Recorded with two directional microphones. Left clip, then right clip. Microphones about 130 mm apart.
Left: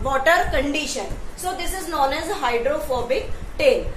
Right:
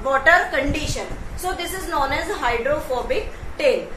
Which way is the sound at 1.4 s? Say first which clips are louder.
Right 1 dB; centre (ahead or behind).